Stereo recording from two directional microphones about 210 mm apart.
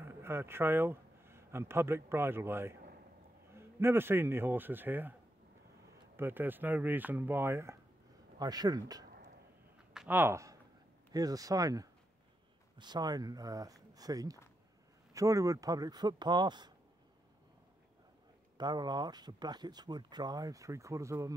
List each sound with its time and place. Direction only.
0.0 s a man's voice: 10° right (ahead or behind)
6.1 s speech: 10° right (ahead or behind)
9.9 s a sound: 10° right (ahead or behind)
11.1 s speech: 15° right (ahead or behind)
18.6 s speech: 20° right (ahead or behind)